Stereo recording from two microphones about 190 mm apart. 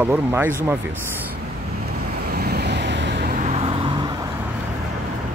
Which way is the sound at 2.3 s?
60° right (ahead or behind).